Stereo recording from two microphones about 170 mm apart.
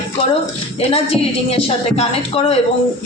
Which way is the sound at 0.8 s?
35° left (ahead or behind).